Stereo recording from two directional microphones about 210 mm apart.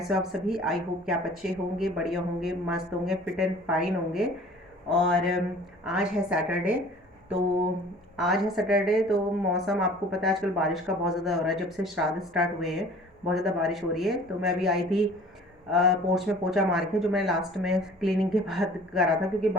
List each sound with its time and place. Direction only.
0.0 s a woman's voice: centre (ahead or behind)
8.1 s a woman's voice: centre (ahead or behind)